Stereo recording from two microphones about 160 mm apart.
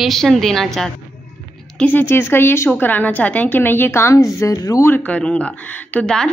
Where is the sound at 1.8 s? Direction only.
10° left (ahead or behind).